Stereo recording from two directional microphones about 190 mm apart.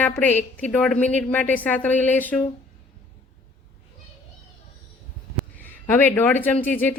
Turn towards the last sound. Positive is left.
turn(degrees=10)  # may be behind; listen again after turning